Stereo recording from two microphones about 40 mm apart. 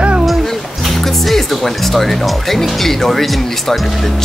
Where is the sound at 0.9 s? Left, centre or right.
Centre.